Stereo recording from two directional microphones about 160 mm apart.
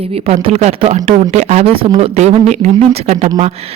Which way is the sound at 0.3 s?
40° right (ahead or behind).